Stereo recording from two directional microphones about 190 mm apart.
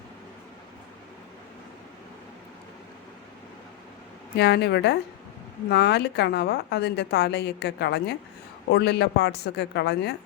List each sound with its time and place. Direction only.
4.4 s a woman's voice: 60° left (ahead or behind)